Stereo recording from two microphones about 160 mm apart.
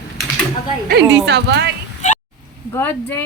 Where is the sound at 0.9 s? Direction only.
90° right.